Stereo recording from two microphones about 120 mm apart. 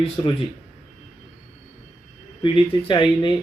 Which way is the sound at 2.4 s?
45° left (ahead or behind).